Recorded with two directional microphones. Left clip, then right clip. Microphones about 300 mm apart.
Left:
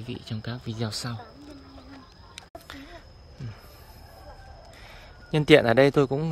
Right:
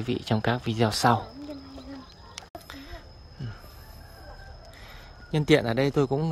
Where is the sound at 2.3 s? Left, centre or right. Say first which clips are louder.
Even; centre.